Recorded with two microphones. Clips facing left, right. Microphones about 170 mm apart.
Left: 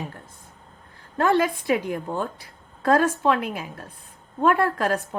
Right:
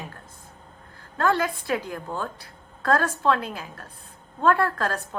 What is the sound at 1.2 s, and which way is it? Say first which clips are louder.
A woman's voice: left 3 dB; 20° left (ahead or behind).